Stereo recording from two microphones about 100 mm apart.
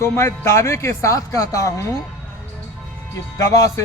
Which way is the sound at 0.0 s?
25° left (ahead or behind).